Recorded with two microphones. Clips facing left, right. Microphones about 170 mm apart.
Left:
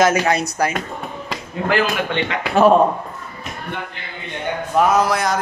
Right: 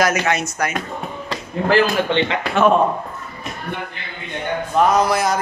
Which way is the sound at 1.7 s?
30° right (ahead or behind).